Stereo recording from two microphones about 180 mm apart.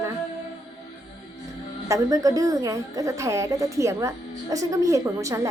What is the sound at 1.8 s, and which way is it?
A woman's voice, 20° right (ahead or behind).